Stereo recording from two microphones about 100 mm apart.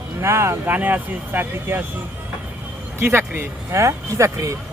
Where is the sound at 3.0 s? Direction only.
25° right (ahead or behind).